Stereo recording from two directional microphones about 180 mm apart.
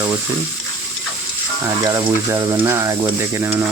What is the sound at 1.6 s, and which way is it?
Speech, 20° right (ahead or behind).